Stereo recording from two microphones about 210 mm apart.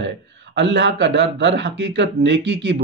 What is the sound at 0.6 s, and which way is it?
A man's voice, 55° right (ahead or behind).